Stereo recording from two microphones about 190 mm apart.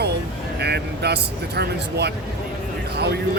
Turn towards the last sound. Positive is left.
turn(degrees=-60)  # may be behind; listen again after turning